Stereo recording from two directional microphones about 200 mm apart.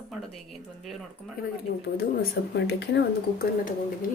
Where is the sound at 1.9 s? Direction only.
50° left (ahead or behind).